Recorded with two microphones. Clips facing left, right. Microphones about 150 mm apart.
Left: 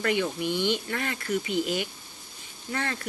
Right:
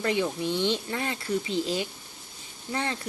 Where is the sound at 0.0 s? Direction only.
30° right (ahead or behind).